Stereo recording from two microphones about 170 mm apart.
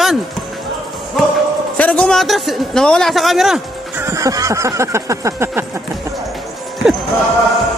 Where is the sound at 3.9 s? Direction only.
15° right (ahead or behind).